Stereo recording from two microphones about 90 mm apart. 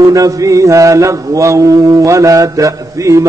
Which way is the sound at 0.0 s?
40° right (ahead or behind).